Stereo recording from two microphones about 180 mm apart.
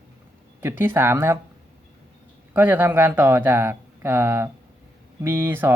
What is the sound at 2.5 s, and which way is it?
Speech, 10° right (ahead or behind).